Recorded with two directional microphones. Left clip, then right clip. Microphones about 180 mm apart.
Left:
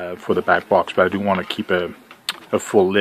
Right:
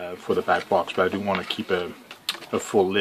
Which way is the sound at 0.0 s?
45° left (ahead or behind).